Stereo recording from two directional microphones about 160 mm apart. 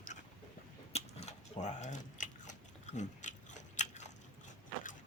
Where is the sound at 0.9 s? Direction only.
40° left (ahead or behind).